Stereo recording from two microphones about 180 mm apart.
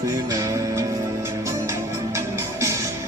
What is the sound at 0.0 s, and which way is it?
Music, 20° right (ahead or behind).